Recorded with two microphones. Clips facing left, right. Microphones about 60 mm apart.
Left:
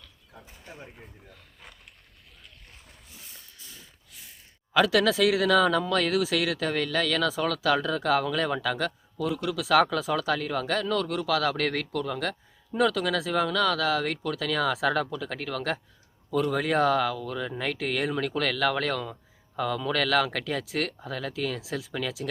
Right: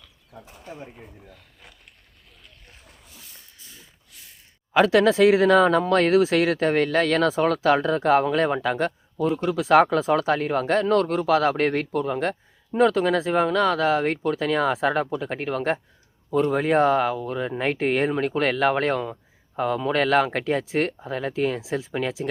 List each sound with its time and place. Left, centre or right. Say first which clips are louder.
0.0 s a sound: right 5 dB; centre
0.8 s speech: right 5 dB; centre
2.6 s dog: right 2 dB; centre
4.7 s speech: right 5 dB; right